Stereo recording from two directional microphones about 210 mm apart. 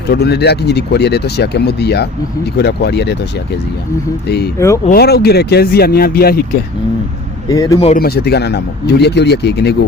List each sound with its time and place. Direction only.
0.1 s speech: 50° left (ahead or behind)
4.3 s speech: 50° left (ahead or behind)
4.5 s speech: 15° left (ahead or behind)
4.9 s speech: 50° left (ahead or behind)
7.4 s a man's voice: 15° left (ahead or behind)
7.9 s speech: 50° left (ahead or behind)